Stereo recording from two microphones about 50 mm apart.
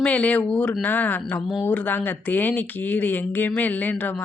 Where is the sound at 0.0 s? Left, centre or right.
Left.